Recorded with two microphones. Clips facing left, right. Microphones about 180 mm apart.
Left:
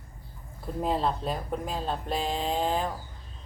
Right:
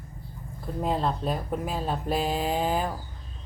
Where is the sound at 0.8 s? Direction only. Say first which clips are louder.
Right 1 dB; centre (ahead or behind).